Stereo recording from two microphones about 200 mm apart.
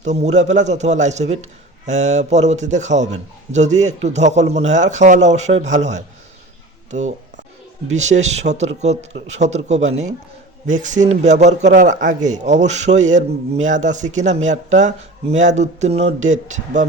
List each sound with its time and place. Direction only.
0.0 s a man's voice: 35° right (ahead or behind)